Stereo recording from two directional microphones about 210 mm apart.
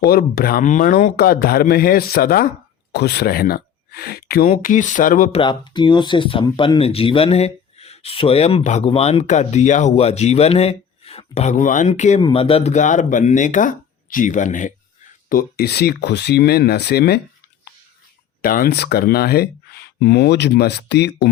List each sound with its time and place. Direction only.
0.0 s speech: 45° left (ahead or behind)
4.4 s speech: 35° left (ahead or behind)
5.3 s speech: 20° left (ahead or behind); by 17.2 s 50° left (ahead or behind)
18.4 s speech: 45° left (ahead or behind)